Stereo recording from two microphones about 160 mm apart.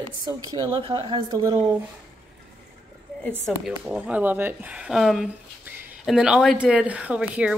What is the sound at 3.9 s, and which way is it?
A woman's voice, 5° right (ahead or behind).